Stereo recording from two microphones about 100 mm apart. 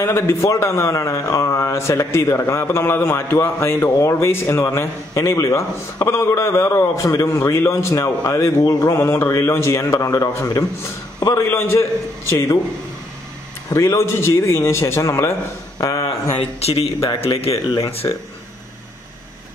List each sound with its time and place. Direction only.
0.0 s speech: 30° left (ahead or behind)
13.7 s a man's voice: 30° left (ahead or behind)
16.3 s a man's voice: 90° left
18.0 s speech: 50° left (ahead or behind)